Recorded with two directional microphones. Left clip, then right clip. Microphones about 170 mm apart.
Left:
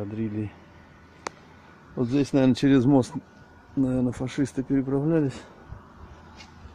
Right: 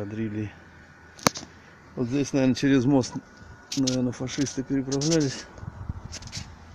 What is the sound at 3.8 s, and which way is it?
Speech, 10° left (ahead or behind).